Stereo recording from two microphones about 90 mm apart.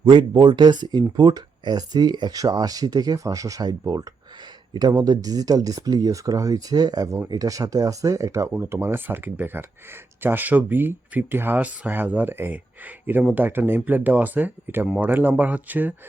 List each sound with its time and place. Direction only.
0.0 s speech: 60° right (ahead or behind); by 8.4 s 35° right (ahead or behind)
8.5 s speech: 25° right (ahead or behind)
14.8 s speech: 10° right (ahead or behind)
15.1 s speech: 20° right (ahead or behind)